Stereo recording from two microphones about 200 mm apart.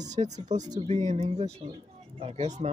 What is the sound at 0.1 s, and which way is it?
Speech, 35° right (ahead or behind).